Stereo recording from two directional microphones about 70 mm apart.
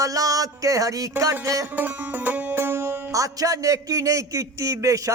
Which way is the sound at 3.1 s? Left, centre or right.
Right.